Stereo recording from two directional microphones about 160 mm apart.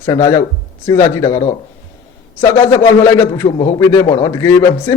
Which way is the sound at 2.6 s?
15° left (ahead or behind).